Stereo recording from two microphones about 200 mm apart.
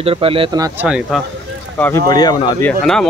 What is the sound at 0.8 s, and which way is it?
Speech, 5° right (ahead or behind).